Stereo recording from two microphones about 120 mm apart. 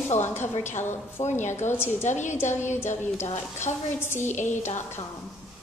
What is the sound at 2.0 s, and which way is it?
Speech, 80° left.